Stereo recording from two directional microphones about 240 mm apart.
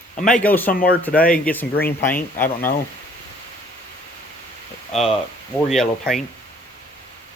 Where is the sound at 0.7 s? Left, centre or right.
Left.